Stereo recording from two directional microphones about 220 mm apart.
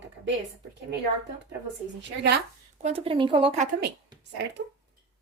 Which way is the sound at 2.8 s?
25° right (ahead or behind).